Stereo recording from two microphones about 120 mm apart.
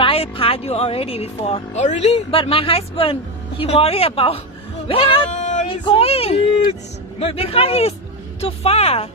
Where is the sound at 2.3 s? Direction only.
50° left (ahead or behind).